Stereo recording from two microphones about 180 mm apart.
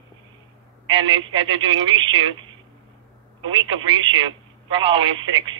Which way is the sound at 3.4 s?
25° right (ahead or behind).